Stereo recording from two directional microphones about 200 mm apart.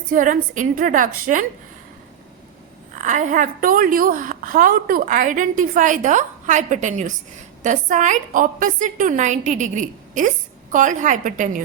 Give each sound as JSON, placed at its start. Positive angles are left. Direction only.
{"t": 0.1, "sound": "a woman's voice", "side_deg": -40}
{"t": 3.0, "sound": "a woman's voice", "side_deg": -40}